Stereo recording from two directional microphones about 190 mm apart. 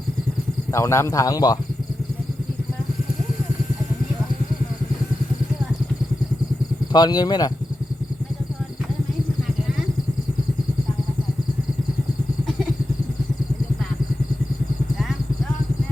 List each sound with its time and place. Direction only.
0.7 s a man's voice: 15° left (ahead or behind)
6.9 s speech: 20° left (ahead or behind)